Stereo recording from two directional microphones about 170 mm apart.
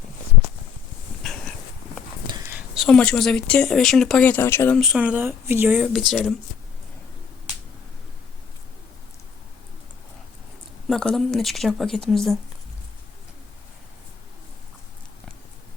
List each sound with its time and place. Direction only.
1.2 s a sound: 5° left (ahead or behind)
2.6 s speech: centre (ahead or behind)
4.8 s speech: 5° right (ahead or behind)
10.8 s speech: centre (ahead or behind)